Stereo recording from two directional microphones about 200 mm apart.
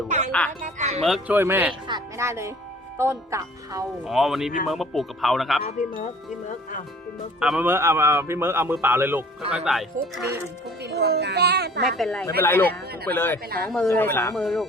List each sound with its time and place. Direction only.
0.3 s speech: 5° left (ahead or behind)
0.6 s speech: 35° right (ahead or behind)
1.0 s speech: centre (ahead or behind)
1.9 s music: 15° right (ahead or behind)
3.0 s speech: 15° right (ahead or behind)
4.0 s speech: centre (ahead or behind)
7.3 s speech: 5° right (ahead or behind)
10.8 s a child's voice: 55° right (ahead or behind)
11.9 s speech: centre (ahead or behind)
14.4 s speech: centre (ahead or behind)